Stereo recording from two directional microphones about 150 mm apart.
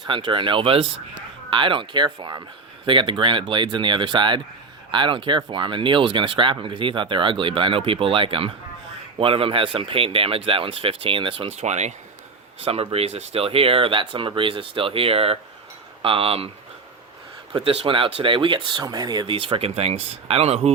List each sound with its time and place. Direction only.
0.0 s speech: 35° right (ahead or behind)
11.5 s speech: 50° right (ahead or behind)
17.5 s speech: 35° right (ahead or behind)